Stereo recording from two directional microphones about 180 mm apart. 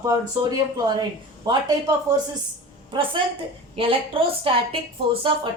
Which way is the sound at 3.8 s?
30° right (ahead or behind).